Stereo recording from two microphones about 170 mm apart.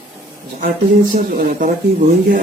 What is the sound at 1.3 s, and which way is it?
Speech, 60° right (ahead or behind).